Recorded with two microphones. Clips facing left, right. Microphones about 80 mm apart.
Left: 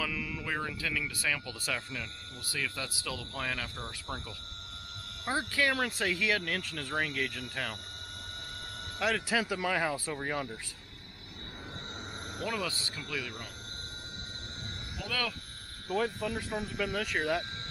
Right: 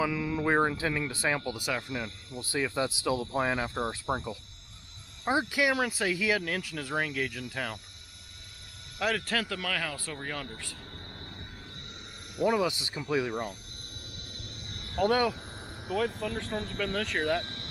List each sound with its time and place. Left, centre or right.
0.0 s speech: right; by 7.7 s centre
9.0 s speech: centre
9.4 s speech: centre
12.4 s speech: centre
15.0 s speech: right
15.9 s speech: centre